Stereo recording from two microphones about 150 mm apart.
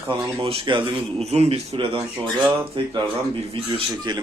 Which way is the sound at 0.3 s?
35° right (ahead or behind).